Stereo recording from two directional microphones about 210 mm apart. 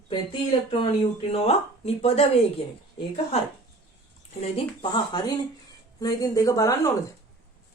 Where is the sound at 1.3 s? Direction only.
30° left (ahead or behind).